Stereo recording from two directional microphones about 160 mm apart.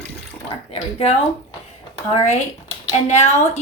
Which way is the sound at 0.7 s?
40° left (ahead or behind).